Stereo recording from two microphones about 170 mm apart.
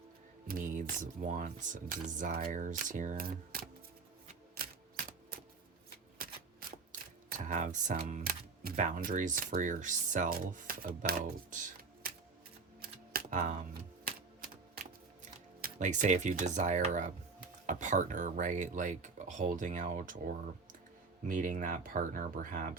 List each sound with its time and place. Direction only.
0.4 s speech: 50° right (ahead or behind)
6.1 s shuffling cards: 60° right (ahead or behind)
7.3 s speech: 50° right (ahead or behind)
11.5 s music: 60° right (ahead or behind)
12.8 s a sound: 60° right (ahead or behind)
15.2 s speech: 45° right (ahead or behind)